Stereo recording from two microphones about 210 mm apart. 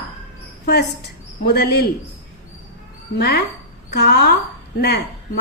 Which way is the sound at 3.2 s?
50° left (ahead or behind).